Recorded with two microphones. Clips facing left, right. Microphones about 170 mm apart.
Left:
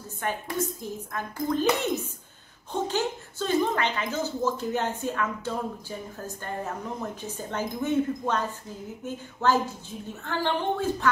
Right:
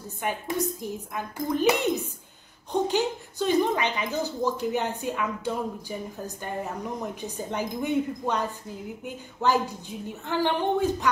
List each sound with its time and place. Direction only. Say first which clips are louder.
0.2 s speech: right 1 dB; 15° right (ahead or behind)